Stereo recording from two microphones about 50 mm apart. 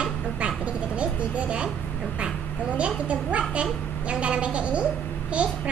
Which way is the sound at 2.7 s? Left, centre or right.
Right.